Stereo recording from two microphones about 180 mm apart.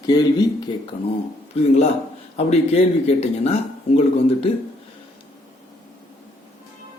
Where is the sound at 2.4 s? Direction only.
35° left (ahead or behind).